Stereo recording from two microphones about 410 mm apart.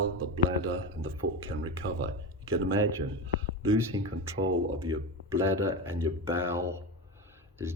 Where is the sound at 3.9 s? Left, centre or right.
Right.